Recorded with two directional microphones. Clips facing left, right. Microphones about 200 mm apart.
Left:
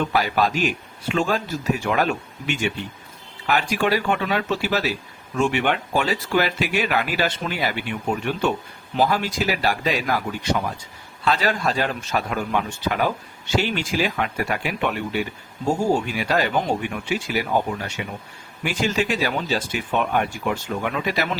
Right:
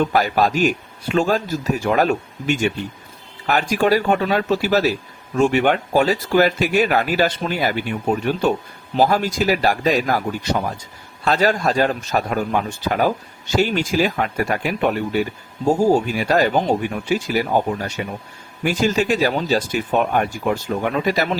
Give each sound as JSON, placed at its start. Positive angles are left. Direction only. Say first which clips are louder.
{"t": 0.1, "sound": "speech", "louder": "right 3 dB", "side_deg": -45}